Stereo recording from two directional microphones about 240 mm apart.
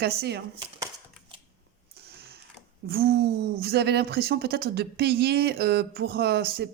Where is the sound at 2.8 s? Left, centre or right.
Right.